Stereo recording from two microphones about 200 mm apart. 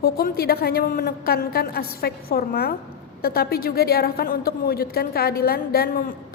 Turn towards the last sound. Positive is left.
turn(degrees=50)  # may be behind; listen again after turning